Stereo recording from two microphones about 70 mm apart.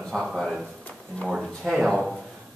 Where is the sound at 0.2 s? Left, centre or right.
Centre.